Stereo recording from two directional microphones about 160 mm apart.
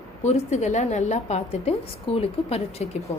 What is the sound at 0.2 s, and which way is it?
A woman's voice, 45° left (ahead or behind).